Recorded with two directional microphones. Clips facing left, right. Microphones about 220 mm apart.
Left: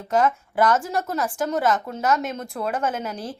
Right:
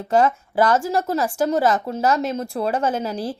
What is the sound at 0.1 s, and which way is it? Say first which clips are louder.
A woman's voice: right 3 dB; 30° right (ahead or behind).